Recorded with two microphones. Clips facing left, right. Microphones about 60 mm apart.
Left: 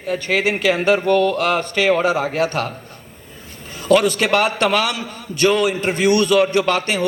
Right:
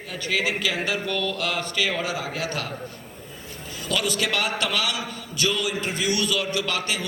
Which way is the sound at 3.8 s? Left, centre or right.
Left.